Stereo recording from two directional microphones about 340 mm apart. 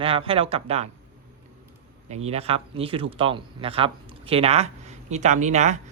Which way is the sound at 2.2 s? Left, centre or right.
Centre.